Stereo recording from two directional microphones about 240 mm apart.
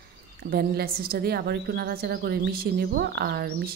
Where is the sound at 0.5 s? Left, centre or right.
Right.